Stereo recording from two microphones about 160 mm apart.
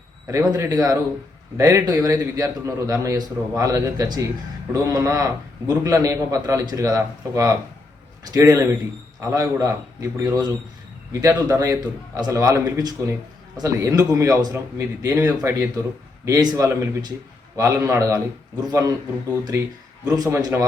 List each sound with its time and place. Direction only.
0.3 s a man's voice: 20° right (ahead or behind)
20.1 s a man's voice: 25° right (ahead or behind)